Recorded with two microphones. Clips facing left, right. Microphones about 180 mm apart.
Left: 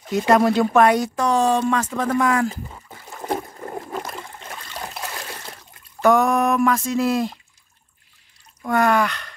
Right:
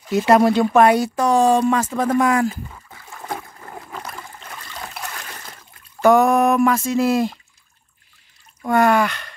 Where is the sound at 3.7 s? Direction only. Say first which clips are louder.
Left 5 dB; 30° left (ahead or behind).